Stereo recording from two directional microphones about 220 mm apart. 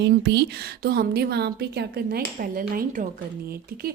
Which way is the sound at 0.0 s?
50° right (ahead or behind).